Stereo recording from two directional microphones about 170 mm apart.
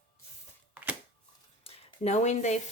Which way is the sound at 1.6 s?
40° left (ahead or behind).